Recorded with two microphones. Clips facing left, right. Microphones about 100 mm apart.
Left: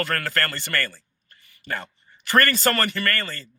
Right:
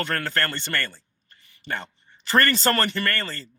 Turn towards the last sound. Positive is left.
turn(degrees=-30)  # may be behind; listen again after turning